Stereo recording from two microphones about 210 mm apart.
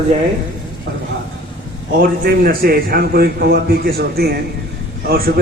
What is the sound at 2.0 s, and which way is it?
A man's voice, 45° right (ahead or behind).